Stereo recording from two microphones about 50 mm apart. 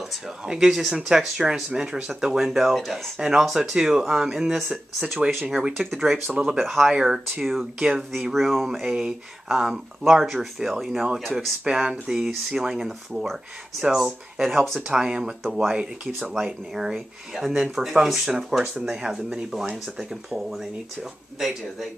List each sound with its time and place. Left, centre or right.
0.5 s speech: centre
3.4 s speech: centre
3.7 s speech: centre
5.8 s speech: centre
8.7 s speech: centre
11.6 s speech: centre
14.4 s speech: centre
14.9 s speech: centre